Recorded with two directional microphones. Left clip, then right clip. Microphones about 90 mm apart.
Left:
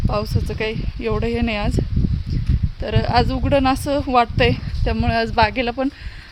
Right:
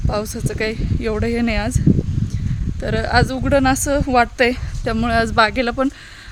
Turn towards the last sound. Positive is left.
turn(degrees=-60)  # may be behind; listen again after turning